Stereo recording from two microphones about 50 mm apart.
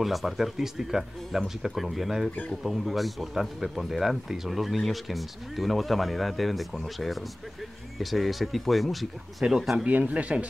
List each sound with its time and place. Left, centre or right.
0.0 s speech: centre
9.8 s speech: right